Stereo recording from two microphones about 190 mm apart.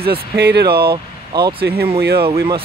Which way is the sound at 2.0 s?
55° right (ahead or behind).